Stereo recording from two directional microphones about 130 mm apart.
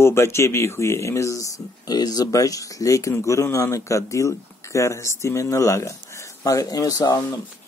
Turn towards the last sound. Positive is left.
turn(degrees=30)  # may be behind; listen again after turning